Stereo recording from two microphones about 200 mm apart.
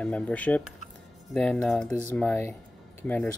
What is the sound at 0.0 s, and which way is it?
Speech, 5° left (ahead or behind).